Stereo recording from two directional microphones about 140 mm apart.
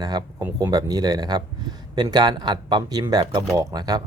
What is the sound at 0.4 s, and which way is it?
Speech, 25° right (ahead or behind).